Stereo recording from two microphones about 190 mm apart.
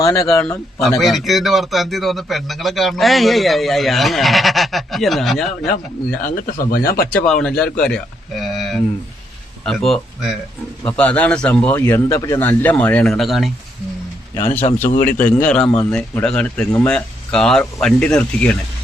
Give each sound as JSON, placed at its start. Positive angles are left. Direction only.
{"t": 0.0, "sound": "speech", "side_deg": 15}
{"t": 0.4, "sound": "a man's voice", "side_deg": 0}
{"t": 6.2, "sound": "speech", "side_deg": 45}
{"t": 7.1, "sound": "a man's voice", "side_deg": 5}
{"t": 14.6, "sound": "speech", "side_deg": 30}
{"t": 15.3, "sound": "a man's voice", "side_deg": 5}